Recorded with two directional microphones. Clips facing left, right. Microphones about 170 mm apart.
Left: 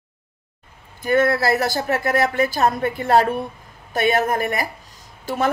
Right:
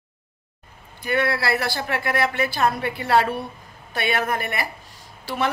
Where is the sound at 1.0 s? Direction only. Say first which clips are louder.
Left 5 dB; 45° left (ahead or behind).